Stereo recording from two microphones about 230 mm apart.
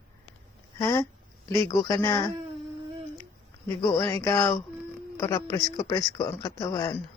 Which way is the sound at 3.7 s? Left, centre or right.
Centre.